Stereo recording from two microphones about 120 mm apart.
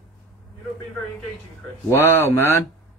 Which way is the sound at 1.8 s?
20° left (ahead or behind).